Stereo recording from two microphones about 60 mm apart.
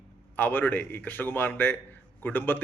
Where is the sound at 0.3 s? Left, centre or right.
Left.